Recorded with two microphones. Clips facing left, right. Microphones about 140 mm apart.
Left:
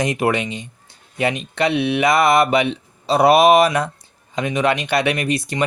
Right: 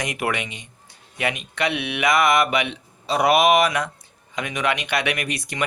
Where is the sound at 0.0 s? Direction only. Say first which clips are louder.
Left 7 dB; 30° left (ahead or behind).